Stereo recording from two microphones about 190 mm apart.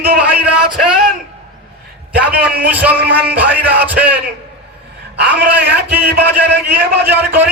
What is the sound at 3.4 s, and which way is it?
Music, 10° right (ahead or behind).